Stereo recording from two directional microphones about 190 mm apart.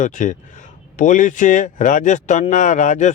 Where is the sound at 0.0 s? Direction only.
40° left (ahead or behind).